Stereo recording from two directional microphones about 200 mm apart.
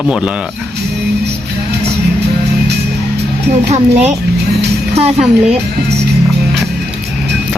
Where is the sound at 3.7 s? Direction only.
35° right (ahead or behind).